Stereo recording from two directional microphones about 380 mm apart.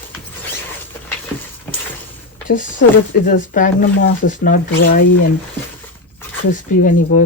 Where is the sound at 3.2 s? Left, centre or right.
Left.